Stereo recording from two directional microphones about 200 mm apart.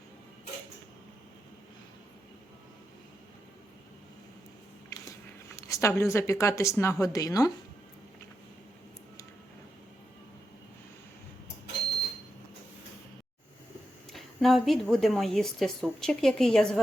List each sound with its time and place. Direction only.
4.9 s a sound: 15° left (ahead or behind)
6.0 s a woman's voice: 15° left (ahead or behind)
14.1 s a woman's voice: centre (ahead or behind)